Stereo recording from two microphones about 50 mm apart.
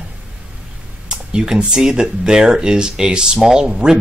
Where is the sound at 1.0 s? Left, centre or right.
Centre.